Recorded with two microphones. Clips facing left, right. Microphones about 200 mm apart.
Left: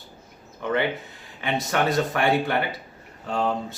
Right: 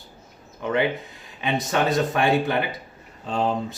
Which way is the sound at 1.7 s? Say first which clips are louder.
Right 1 dB; 20° right (ahead or behind).